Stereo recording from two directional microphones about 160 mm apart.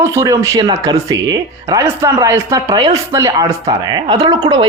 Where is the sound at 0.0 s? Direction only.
20° right (ahead or behind).